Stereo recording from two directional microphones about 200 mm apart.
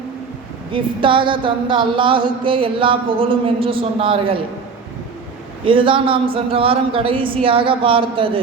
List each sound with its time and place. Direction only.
0.7 s speech: 25° right (ahead or behind)
5.6 s speech: 25° right (ahead or behind)